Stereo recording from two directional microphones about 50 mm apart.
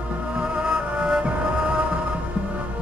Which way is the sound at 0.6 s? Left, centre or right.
Centre.